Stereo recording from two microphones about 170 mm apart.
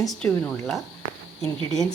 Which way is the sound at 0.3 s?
10° left (ahead or behind).